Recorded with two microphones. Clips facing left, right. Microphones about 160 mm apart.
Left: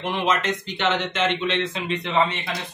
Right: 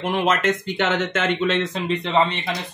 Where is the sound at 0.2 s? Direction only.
50° right (ahead or behind).